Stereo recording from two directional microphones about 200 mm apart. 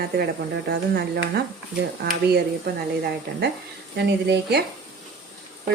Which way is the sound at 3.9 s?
55° right (ahead or behind).